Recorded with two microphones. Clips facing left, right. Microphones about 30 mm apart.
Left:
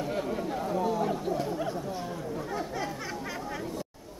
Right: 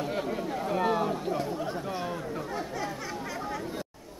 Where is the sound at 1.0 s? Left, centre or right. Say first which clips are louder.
Even; centre.